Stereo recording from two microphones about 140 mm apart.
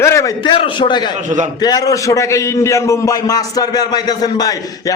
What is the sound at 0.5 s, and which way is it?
A man's voice, 35° left (ahead or behind).